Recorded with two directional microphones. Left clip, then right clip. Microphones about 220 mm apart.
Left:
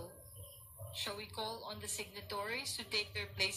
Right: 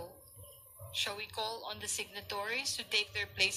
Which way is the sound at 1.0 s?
25° right (ahead or behind).